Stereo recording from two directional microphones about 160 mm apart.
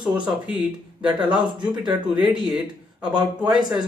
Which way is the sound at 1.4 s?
25° right (ahead or behind).